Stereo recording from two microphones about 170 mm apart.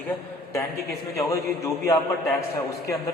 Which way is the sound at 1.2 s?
20° left (ahead or behind).